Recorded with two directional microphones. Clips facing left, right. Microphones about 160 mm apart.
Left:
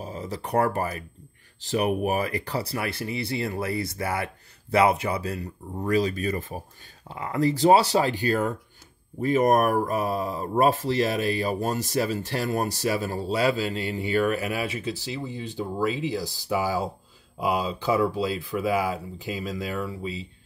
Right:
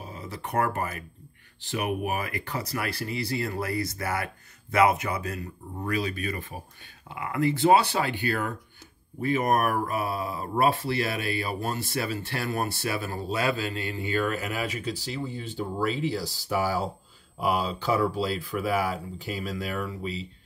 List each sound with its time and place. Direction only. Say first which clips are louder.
0.0 s speech: left 5 dB; 40° left (ahead or behind)
13.9 s speech: left 5 dB; 15° left (ahead or behind)